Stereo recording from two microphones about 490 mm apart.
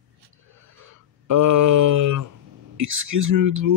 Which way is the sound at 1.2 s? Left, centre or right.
Right.